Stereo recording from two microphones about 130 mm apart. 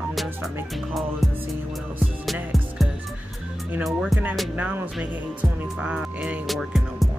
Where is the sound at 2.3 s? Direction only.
Centre (ahead or behind).